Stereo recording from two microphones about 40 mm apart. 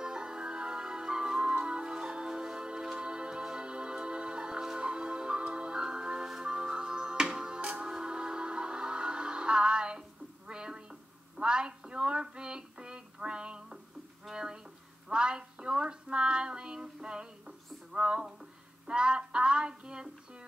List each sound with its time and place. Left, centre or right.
0.0 s music: centre
14.3 s a sound: right
17.9 s music: right